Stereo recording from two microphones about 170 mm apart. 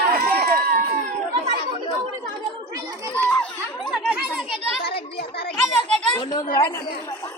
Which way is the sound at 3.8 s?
5° left (ahead or behind).